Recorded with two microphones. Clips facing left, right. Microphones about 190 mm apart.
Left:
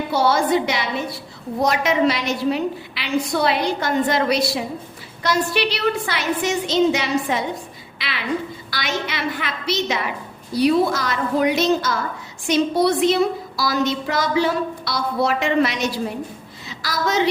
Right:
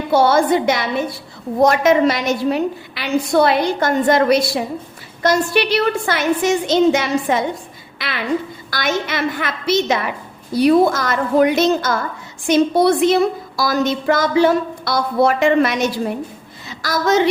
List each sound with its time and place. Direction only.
0.1 s a woman's voice: 50° right (ahead or behind)